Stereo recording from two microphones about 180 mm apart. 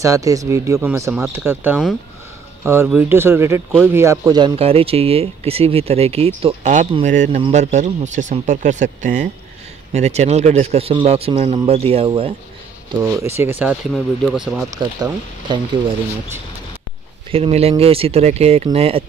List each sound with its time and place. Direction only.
0.0 s speech: 20° right (ahead or behind)
4.6 s speech: 35° right (ahead or behind)
13.2 s speech: 15° right (ahead or behind)
14.8 s speech: 25° right (ahead or behind)
17.3 s speech: 35° right (ahead or behind)